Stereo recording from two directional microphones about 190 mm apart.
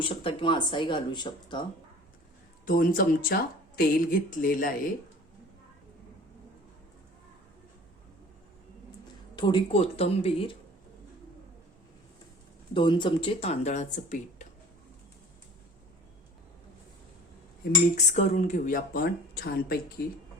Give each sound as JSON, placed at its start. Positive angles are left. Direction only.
{"t": 0.0, "sound": "speech", "side_deg": 30}
{"t": 2.6, "sound": "speech", "side_deg": 50}
{"t": 9.3, "sound": "speech", "side_deg": 30}
{"t": 12.7, "sound": "speech", "side_deg": 25}
{"t": 17.9, "sound": "speech", "side_deg": 40}